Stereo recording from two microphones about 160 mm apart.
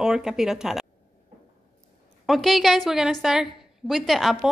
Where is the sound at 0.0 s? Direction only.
5° right (ahead or behind).